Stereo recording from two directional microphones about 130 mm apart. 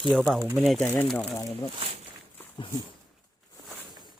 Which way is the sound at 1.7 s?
50° right (ahead or behind).